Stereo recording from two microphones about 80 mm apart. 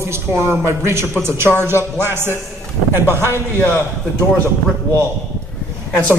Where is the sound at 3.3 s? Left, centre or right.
Left.